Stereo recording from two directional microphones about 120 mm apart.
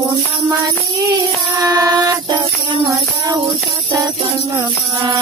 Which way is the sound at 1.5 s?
30° right (ahead or behind).